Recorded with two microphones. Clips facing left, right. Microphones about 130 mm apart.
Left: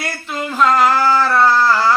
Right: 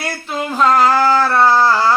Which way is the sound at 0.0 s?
25° right (ahead or behind).